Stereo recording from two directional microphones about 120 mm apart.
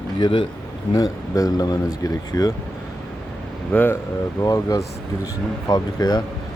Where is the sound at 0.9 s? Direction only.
30° left (ahead or behind).